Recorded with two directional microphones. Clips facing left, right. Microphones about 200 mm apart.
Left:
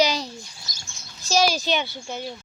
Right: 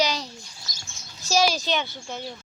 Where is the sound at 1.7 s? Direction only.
10° left (ahead or behind).